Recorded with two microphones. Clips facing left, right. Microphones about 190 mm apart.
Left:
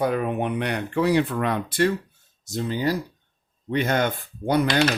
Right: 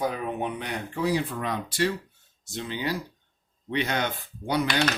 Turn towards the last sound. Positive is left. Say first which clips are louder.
# left 5 dB
turn(degrees=50)  # may be behind; listen again after turning